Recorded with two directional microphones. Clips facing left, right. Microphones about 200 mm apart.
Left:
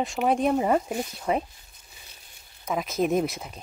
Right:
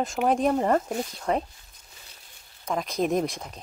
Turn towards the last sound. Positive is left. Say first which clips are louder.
# left 1 dB
turn(degrees=5)  # may be behind; listen again after turning